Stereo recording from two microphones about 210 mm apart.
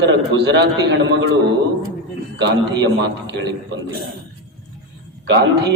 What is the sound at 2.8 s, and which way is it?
Speech, 55° right (ahead or behind).